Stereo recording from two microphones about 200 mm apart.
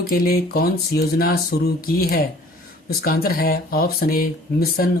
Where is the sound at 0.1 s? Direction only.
50° left (ahead or behind).